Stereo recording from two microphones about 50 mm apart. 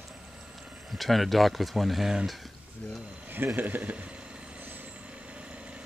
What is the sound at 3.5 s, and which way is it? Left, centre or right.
Speech, right.